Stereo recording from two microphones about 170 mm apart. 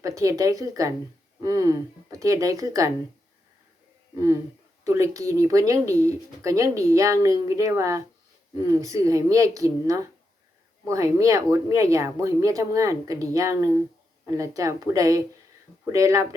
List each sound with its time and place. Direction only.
0.2 s speech: 20° right (ahead or behind)
4.8 s speech: 20° right (ahead or behind)